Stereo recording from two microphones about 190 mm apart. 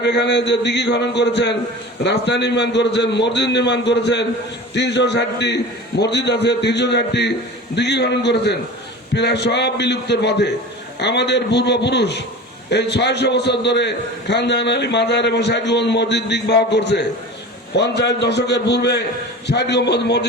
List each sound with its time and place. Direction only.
0.0 s a man's voice: 65° left (ahead or behind)